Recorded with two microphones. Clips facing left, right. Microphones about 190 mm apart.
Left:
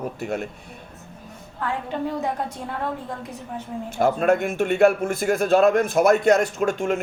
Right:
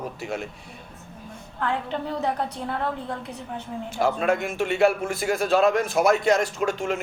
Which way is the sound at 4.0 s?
50° left (ahead or behind).